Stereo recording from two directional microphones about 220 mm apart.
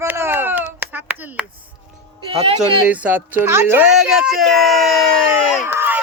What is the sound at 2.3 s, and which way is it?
Speech, 25° right (ahead or behind).